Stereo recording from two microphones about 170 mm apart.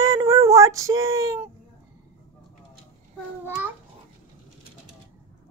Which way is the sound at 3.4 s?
10° right (ahead or behind).